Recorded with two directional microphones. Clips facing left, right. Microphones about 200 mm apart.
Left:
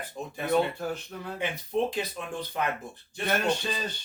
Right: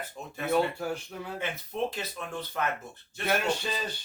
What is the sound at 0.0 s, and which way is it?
Speech, 15° left (ahead or behind).